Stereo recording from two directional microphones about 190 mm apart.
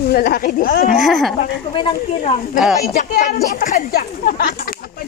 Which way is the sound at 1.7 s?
30° left (ahead or behind).